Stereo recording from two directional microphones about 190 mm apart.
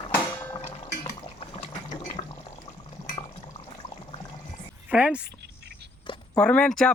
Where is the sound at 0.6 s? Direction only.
35° left (ahead or behind).